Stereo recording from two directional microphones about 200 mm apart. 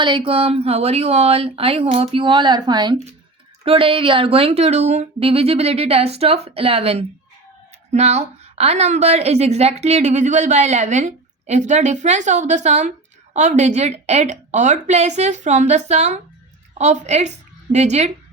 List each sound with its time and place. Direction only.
0.0 s a woman's voice: 25° right (ahead or behind)